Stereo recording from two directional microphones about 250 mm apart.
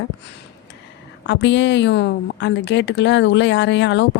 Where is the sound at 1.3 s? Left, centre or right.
Left.